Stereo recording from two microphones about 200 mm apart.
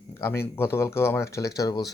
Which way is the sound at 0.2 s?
10° left (ahead or behind).